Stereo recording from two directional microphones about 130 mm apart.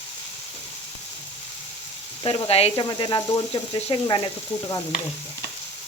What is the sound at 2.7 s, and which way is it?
Speech, 35° left (ahead or behind).